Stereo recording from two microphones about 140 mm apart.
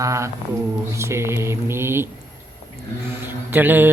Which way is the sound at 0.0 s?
20° right (ahead or behind).